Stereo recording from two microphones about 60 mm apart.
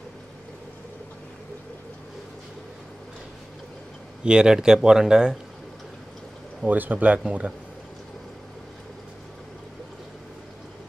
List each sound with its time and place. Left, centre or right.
4.2 s speech: centre
6.6 s speech: right